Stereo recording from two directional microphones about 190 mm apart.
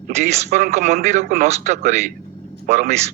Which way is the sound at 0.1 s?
35° right (ahead or behind).